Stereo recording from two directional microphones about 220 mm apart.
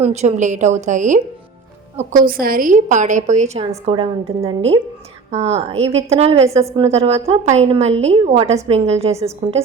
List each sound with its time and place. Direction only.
0.0 s a woman's voice: 30° right (ahead or behind)